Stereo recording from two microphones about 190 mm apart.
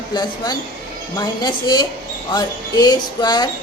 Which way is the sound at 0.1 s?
20° left (ahead or behind).